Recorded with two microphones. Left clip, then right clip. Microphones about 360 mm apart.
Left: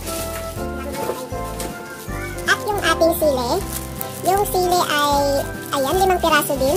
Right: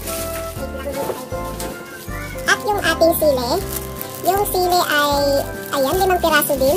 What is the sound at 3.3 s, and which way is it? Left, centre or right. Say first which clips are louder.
Music: right 1 dB; left.